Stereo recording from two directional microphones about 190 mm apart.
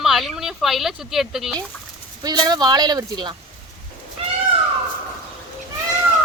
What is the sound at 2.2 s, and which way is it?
Speech, 20° right (ahead or behind).